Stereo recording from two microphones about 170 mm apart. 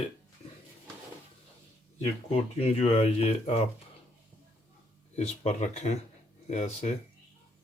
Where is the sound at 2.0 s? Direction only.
35° left (ahead or behind).